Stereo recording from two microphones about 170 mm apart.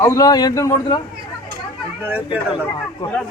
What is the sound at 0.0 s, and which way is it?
Speech, 20° left (ahead or behind).